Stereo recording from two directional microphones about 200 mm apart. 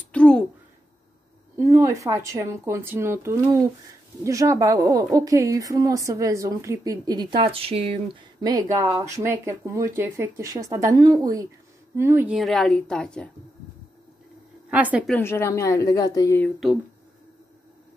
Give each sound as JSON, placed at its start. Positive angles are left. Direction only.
{"t": 0.1, "sound": "a sound", "side_deg": 5}
{"t": 1.6, "sound": "a woman's voice", "side_deg": -15}
{"t": 12.4, "sound": "a woman's voice", "side_deg": 0}
{"t": 14.7, "sound": "a woman's voice", "side_deg": -5}
{"t": 15.0, "sound": "speech", "side_deg": 10}